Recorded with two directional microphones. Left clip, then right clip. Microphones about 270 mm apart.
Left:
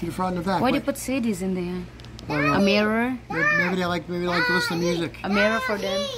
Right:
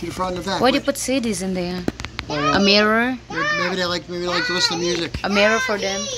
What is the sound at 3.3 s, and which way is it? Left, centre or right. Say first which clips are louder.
A child's voice: left 4 dB; left.